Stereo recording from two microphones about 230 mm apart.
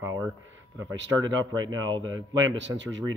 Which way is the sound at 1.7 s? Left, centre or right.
Right.